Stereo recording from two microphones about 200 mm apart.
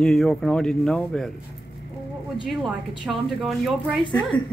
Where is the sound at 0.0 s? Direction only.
Centre (ahead or behind).